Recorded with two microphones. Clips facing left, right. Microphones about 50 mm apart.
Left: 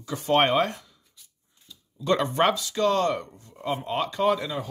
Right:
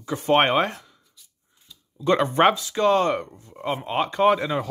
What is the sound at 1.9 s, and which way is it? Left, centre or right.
Speech, right.